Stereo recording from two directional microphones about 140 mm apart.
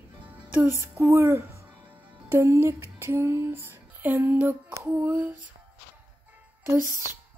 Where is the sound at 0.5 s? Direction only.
20° right (ahead or behind).